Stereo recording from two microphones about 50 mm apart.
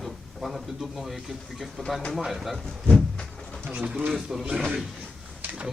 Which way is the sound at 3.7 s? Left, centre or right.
Right.